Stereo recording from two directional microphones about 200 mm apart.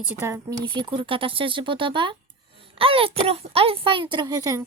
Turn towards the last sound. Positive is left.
turn(degrees=-20)  # may be behind; listen again after turning